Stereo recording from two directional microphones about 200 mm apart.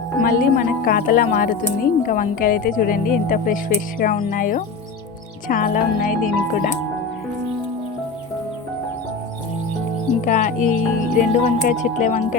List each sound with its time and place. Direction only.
0.2 s speech: 45° left (ahead or behind)
10.2 s speech: 40° left (ahead or behind)